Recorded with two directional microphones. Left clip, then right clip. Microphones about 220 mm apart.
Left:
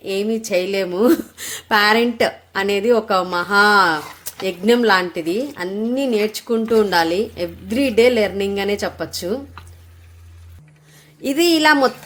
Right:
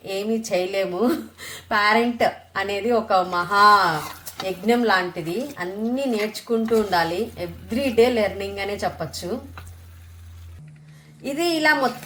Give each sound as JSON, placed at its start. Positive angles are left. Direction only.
{"t": 0.0, "sound": "speech", "side_deg": 55}
{"t": 11.2, "sound": "speech", "side_deg": 55}